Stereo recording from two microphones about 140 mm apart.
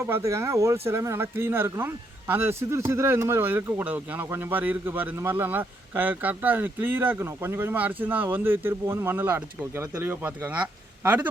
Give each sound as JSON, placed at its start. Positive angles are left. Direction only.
{"t": 0.0, "sound": "speech", "side_deg": -20}